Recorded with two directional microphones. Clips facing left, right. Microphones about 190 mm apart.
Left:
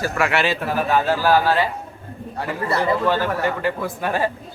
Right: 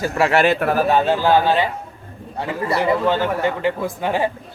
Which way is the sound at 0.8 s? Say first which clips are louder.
Right 3 dB; 30° right (ahead or behind).